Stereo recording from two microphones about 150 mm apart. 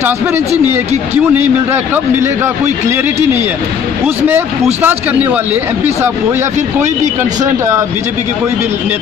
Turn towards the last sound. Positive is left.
turn(degrees=-20)  # may be behind; listen again after turning